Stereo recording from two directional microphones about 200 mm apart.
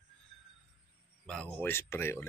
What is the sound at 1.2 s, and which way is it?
Speech, 5° left (ahead or behind).